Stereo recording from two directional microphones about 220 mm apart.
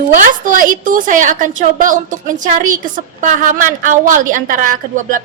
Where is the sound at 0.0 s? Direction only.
40° right (ahead or behind).